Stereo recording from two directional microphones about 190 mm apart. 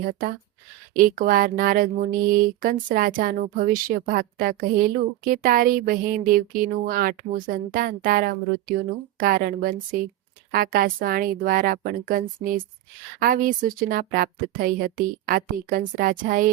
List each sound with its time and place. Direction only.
0.1 s speech: 50° right (ahead or behind)